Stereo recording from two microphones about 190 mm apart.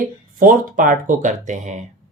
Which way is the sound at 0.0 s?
45° right (ahead or behind).